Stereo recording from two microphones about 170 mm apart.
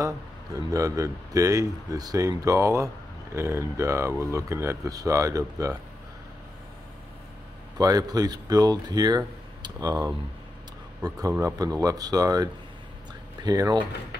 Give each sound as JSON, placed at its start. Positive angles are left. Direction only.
{"t": 0.6, "sound": "speech", "side_deg": -20}
{"t": 7.7, "sound": "speech", "side_deg": -20}